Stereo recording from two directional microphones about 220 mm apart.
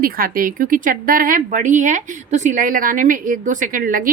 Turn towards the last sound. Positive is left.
turn(degrees=-40)  # may be behind; listen again after turning